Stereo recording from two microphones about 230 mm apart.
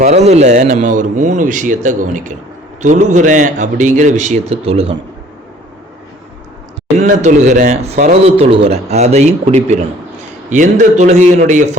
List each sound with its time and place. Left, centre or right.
0.0 s speech: right
7.0 s speech: right